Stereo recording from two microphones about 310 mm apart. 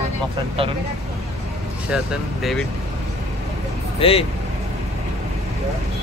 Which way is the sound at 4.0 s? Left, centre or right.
Centre.